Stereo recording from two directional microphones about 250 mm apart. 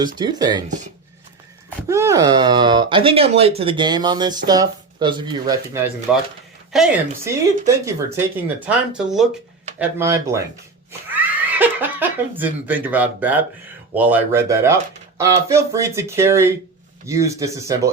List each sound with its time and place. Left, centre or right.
0.2 s speech: centre
1.9 s a woman's voice: centre